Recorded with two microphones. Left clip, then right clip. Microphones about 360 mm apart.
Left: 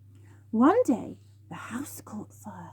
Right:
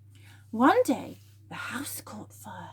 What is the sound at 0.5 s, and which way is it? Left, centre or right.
Speech, centre.